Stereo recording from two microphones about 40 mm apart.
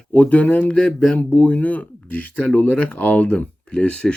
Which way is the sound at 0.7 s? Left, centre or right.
Left.